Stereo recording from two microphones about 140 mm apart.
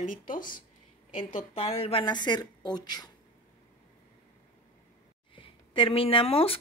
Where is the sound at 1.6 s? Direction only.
45° left (ahead or behind); by 3.0 s 30° left (ahead or behind).